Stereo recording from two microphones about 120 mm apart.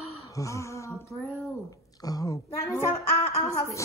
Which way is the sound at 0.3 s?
25° left (ahead or behind).